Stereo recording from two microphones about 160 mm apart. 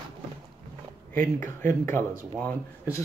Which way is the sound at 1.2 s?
55° right (ahead or behind).